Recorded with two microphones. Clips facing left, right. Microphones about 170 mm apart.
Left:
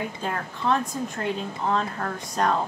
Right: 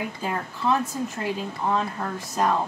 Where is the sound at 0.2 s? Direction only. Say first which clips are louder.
Right 1 dB; 10° right (ahead or behind).